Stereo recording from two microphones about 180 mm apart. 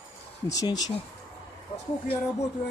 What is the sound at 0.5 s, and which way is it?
Speech, 20° left (ahead or behind).